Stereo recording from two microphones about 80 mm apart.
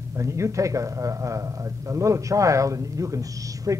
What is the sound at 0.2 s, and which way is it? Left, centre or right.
A man's voice, right.